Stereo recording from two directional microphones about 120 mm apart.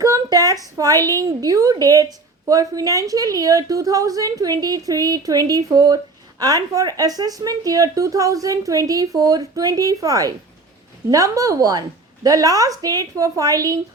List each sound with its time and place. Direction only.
0.0 s a woman's voice: 30° right (ahead or behind)